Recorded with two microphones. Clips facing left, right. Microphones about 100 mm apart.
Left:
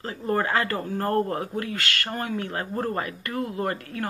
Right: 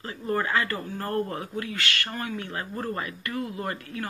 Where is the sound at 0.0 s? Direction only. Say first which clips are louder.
Left 3 dB; 40° left (ahead or behind).